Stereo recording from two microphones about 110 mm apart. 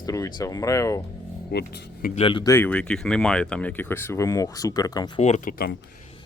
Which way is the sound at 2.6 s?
10° left (ahead or behind).